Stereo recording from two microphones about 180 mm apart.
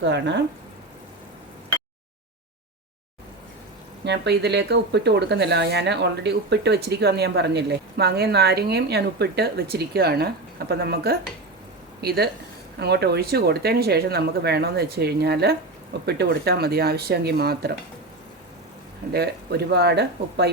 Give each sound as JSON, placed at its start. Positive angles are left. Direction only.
{"t": 0.0, "sound": "speech", "side_deg": -75}
{"t": 4.0, "sound": "speech", "side_deg": -70}
{"t": 19.1, "sound": "speech", "side_deg": -65}